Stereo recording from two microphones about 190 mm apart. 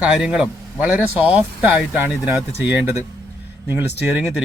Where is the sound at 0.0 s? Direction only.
5° right (ahead or behind).